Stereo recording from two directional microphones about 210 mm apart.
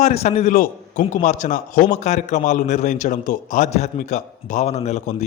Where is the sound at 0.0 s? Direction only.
30° left (ahead or behind).